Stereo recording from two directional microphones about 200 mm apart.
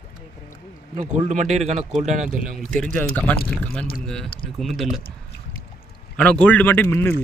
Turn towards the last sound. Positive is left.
turn(degrees=10)  # may be behind; listen again after turning